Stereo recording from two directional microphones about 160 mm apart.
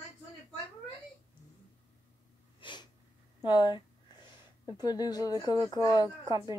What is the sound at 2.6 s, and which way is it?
Sneeze, 30° left (ahead or behind).